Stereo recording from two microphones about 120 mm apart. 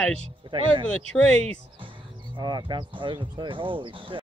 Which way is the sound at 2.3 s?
40° right (ahead or behind).